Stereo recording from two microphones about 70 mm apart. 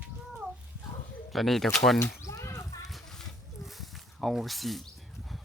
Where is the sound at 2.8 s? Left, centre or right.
Centre.